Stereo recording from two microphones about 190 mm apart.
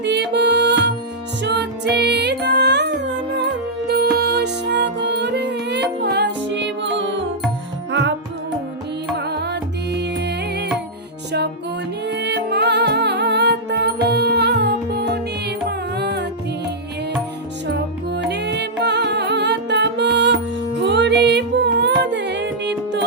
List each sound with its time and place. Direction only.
0.0 s music: 65° right (ahead or behind)
9.1 s music: 60° right (ahead or behind)
12.0 s music: 65° right (ahead or behind)
17.7 s music: 65° right (ahead or behind)